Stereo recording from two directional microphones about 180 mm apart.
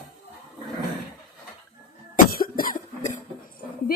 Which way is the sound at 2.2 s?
55° left (ahead or behind).